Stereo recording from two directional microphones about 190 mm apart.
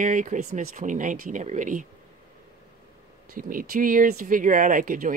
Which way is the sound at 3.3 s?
45° right (ahead or behind).